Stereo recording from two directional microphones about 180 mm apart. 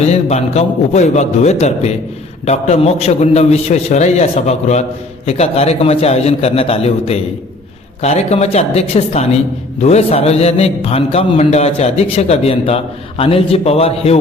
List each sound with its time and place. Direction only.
0.0 s a man's voice: 35° left (ahead or behind)